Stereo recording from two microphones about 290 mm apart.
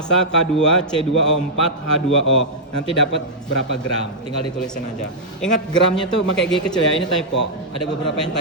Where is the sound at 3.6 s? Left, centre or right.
Left.